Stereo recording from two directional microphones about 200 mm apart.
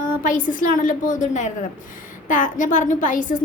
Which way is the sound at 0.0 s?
40° left (ahead or behind).